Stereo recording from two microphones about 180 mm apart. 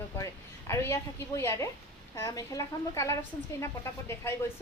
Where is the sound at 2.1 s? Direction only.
20° left (ahead or behind).